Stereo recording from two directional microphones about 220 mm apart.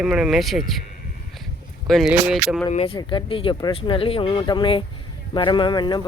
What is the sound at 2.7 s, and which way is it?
Speech, 25° left (ahead or behind).